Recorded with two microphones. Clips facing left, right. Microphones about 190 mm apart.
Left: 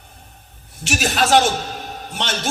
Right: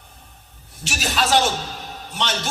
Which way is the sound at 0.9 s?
55° left (ahead or behind).